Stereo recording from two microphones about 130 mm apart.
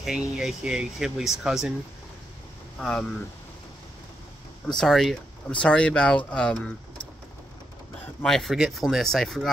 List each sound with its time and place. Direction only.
0.0 s speech: 5° right (ahead or behind)
2.8 s speech: 5° left (ahead or behind)
4.7 s speech: centre (ahead or behind)
8.2 s speech: centre (ahead or behind)